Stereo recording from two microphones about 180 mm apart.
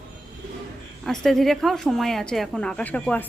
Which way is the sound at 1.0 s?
Centre (ahead or behind).